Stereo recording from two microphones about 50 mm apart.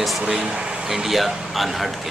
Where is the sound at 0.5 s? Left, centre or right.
Centre.